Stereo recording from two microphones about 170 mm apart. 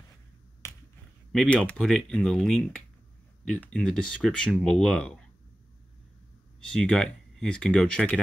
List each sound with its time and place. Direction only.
0.6 s finger snapping: 15° left (ahead or behind)
1.3 s speech: centre (ahead or behind)
6.7 s speech: 5° left (ahead or behind)